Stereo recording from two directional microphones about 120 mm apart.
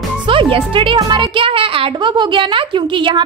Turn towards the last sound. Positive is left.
turn(degrees=-45)  # may be behind; listen again after turning